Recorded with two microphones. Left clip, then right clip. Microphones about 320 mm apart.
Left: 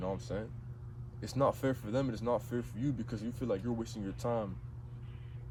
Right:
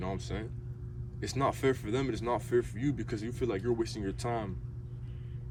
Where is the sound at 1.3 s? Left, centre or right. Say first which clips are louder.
Right 2 dB; centre.